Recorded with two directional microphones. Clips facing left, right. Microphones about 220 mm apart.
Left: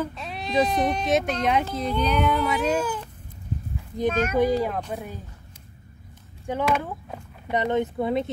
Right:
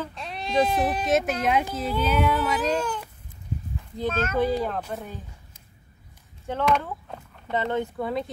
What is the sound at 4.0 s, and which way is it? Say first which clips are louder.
A woman's voice: left 3 dB; 15° left (ahead or behind).